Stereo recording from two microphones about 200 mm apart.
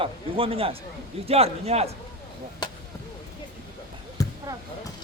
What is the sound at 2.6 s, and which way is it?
Arrow, 20° left (ahead or behind).